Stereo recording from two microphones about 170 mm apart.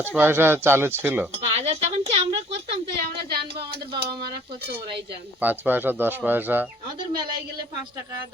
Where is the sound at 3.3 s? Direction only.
70° right (ahead or behind).